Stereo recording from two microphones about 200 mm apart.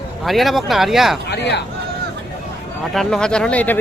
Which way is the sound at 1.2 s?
60° left (ahead or behind).